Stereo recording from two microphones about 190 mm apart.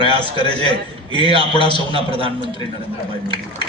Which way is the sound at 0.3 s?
30° right (ahead or behind).